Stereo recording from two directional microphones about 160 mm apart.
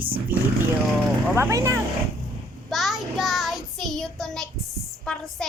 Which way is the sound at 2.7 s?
Centre (ahead or behind).